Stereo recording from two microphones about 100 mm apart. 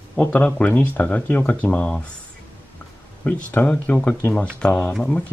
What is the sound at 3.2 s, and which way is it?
Speech, 15° left (ahead or behind).